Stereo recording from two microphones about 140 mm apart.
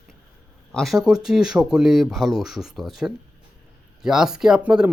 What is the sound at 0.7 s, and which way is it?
Speech, centre (ahead or behind).